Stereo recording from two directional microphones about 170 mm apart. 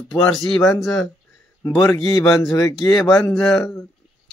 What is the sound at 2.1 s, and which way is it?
Speech, 20° left (ahead or behind).